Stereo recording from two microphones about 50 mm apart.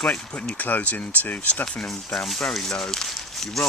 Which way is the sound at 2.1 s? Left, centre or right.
Centre.